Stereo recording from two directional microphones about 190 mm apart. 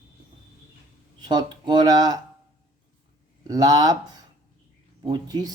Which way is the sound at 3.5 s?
20° right (ahead or behind).